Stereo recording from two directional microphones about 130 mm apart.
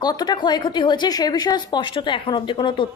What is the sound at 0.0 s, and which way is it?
A woman's voice, 30° left (ahead or behind).